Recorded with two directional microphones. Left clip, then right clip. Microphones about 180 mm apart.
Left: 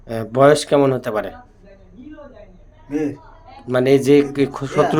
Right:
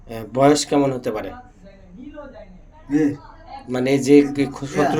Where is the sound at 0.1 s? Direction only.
50° left (ahead or behind).